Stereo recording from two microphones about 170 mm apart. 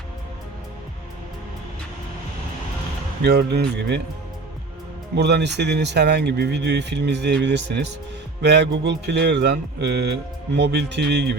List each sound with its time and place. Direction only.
3.2 s speech: 75° right (ahead or behind)
5.1 s speech: 80° right